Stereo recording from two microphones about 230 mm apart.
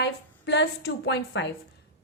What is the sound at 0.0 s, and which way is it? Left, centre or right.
A woman's voice, left.